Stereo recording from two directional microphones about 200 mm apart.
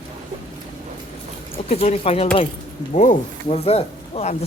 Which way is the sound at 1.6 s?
35° left (ahead or behind).